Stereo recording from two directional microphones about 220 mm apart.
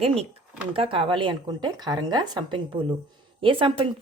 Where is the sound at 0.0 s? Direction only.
25° right (ahead or behind).